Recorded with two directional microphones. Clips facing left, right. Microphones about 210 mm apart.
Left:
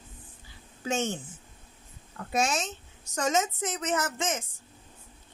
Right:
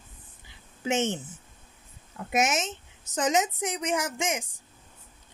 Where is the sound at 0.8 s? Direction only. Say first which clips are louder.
Right 3 dB; 20° right (ahead or behind).